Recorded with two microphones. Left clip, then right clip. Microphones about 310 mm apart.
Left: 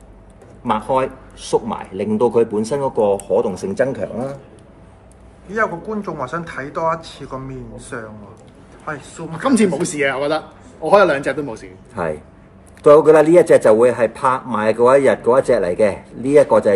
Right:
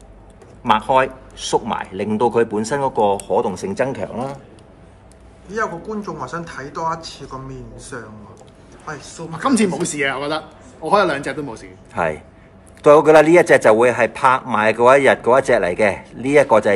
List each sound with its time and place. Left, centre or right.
0.7 s a man's voice: centre
5.5 s a man's voice: centre
12.8 s speech: right